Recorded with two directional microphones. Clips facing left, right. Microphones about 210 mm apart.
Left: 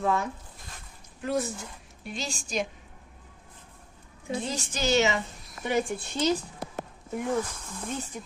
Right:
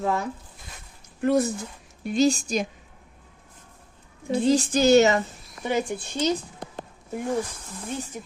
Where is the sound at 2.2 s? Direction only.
40° right (ahead or behind).